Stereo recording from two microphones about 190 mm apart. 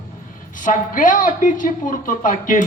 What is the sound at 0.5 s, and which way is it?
A woman's voice, 45° left (ahead or behind).